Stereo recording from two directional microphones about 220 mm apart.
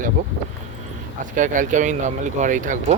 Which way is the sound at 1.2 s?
35° right (ahead or behind).